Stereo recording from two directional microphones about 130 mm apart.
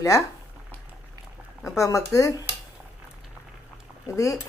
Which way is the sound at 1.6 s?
25° left (ahead or behind).